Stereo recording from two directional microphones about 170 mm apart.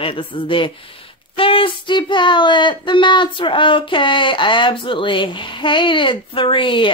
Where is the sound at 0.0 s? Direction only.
30° left (ahead or behind).